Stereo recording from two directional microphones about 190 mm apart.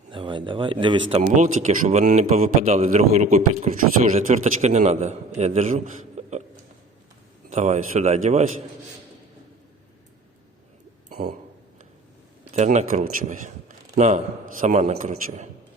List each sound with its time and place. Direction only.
0.1 s speech: 25° right (ahead or behind)
1.1 s a man's voice: 40° right (ahead or behind)
7.5 s a man's voice: 40° right (ahead or behind)
12.5 s a man's voice: 35° right (ahead or behind)